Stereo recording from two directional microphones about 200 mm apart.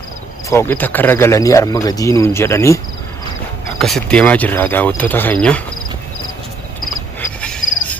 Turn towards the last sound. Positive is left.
turn(degrees=5)  # may be behind; listen again after turning